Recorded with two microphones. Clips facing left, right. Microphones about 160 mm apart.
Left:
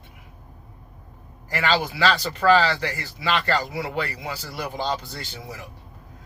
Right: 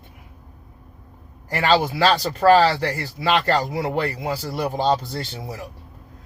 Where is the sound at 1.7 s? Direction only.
40° right (ahead or behind).